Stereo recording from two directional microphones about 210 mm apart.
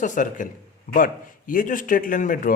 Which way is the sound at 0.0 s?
35° left (ahead or behind).